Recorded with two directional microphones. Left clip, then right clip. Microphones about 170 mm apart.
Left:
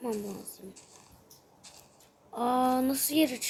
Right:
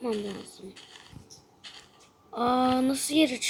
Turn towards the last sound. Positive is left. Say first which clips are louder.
# right 3 dB
turn(degrees=-5)  # may be behind; listen again after turning